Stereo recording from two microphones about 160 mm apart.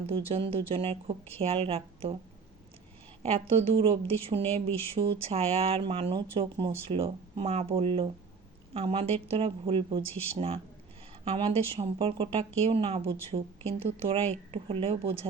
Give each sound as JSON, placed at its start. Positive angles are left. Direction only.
{"t": 0.3, "sound": "speech", "side_deg": -35}
{"t": 3.2, "sound": "speech", "side_deg": -40}